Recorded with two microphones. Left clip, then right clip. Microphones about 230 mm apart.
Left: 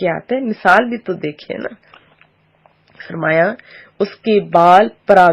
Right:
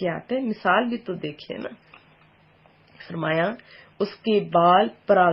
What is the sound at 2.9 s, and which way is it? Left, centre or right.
A man's voice, left.